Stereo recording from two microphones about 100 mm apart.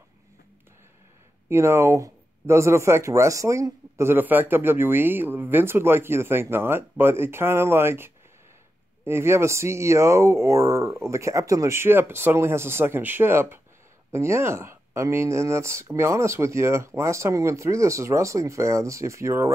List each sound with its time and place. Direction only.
1.5 s speech: 25° right (ahead or behind)